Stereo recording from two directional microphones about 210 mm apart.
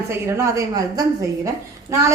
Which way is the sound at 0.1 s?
15° right (ahead or behind).